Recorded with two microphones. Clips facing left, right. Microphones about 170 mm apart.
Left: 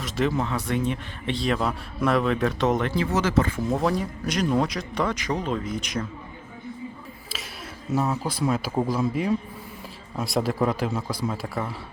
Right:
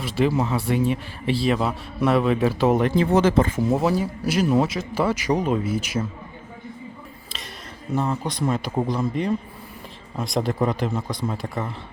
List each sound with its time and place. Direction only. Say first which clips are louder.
0.0 s speech: right 3 dB; 5° right (ahead or behind)
3.2 s speech: right 4 dB; 25° right (ahead or behind)
3.7 s speech: right 3 dB; 5° right (ahead or behind)
7.3 s a sound: left 2 dB; 5° left (ahead or behind)
7.9 s speech: right 1 dB; 5° left (ahead or behind)